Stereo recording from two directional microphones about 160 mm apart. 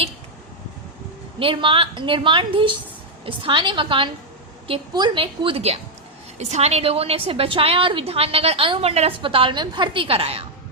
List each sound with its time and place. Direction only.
1.4 s a woman's voice: 35° right (ahead or behind)